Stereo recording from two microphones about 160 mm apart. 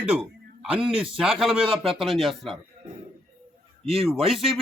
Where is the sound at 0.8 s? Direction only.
35° right (ahead or behind).